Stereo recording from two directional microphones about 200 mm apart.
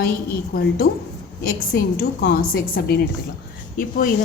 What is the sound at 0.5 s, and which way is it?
Speech, 50° left (ahead or behind).